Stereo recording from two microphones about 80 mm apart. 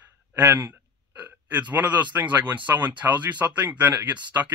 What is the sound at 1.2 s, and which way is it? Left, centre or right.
Speech, centre.